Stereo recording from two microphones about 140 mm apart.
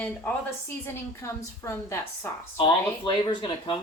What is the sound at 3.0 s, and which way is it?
Speech, 35° left (ahead or behind).